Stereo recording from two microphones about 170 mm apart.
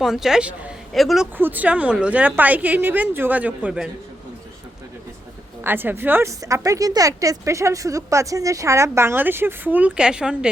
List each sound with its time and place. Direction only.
0.0 s speech: centre (ahead or behind)
5.6 s speech: 10° right (ahead or behind)